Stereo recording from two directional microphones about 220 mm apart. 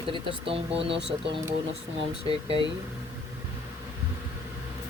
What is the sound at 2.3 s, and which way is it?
Speech, 25° right (ahead or behind).